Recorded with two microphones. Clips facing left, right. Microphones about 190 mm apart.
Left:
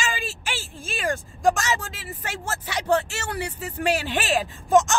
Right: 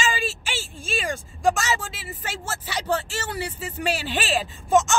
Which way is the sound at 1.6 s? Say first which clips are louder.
Even; 55° left (ahead or behind).